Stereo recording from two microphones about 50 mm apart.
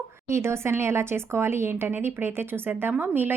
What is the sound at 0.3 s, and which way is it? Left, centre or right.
Speech, right.